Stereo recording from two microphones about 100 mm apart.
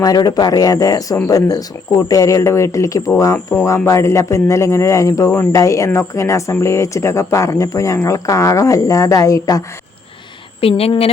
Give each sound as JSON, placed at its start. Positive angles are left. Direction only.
{"t": 0.0, "sound": "a man's voice", "side_deg": 40}
{"t": 10.6, "sound": "speech", "side_deg": 75}